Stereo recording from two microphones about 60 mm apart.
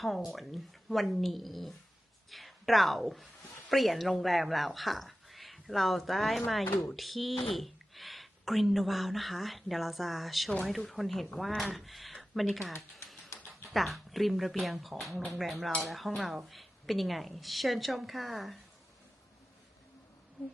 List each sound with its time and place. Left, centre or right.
0.0 s speech: centre
13.3 s a sound: left
13.7 s speech: centre